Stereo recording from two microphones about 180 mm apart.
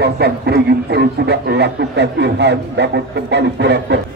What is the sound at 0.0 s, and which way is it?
Speech, 65° right (ahead or behind).